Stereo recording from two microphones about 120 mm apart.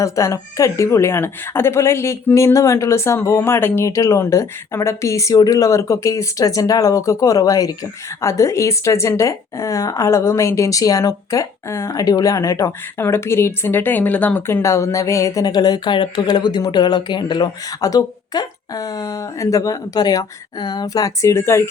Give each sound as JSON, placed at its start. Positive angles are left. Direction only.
{"t": 0.0, "sound": "a woman's voice", "side_deg": 25}